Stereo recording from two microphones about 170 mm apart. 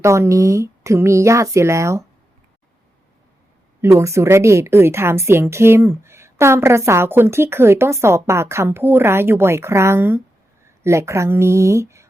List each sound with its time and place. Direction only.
0.0 s a woman's voice: 15° right (ahead or behind)
3.8 s a woman's voice: 15° right (ahead or behind)